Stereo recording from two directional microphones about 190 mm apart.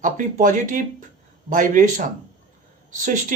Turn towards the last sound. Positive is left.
turn(degrees=-45)  # may be behind; listen again after turning